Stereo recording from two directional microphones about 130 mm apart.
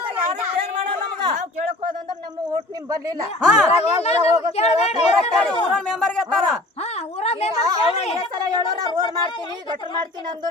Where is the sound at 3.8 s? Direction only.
55° left (ahead or behind).